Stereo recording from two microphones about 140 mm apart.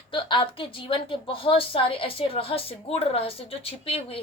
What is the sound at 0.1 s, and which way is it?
A woman's voice, 35° left (ahead or behind).